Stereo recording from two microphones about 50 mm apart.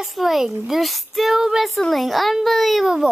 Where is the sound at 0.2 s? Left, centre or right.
Centre.